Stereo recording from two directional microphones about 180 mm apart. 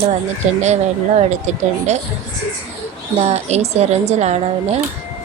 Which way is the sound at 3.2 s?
35° right (ahead or behind).